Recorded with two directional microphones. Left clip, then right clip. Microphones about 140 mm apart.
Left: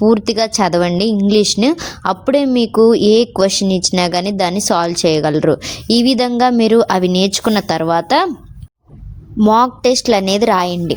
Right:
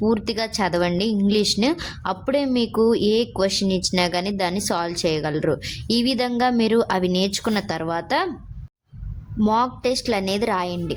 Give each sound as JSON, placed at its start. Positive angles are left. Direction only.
{"t": 0.0, "sound": "speech", "side_deg": 35}
{"t": 9.5, "sound": "a woman's voice", "side_deg": 45}